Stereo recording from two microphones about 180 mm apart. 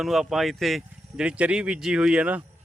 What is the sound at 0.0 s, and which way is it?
Speech, centre (ahead or behind).